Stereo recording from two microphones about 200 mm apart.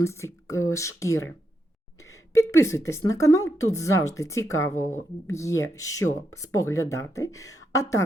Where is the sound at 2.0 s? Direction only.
15° left (ahead or behind).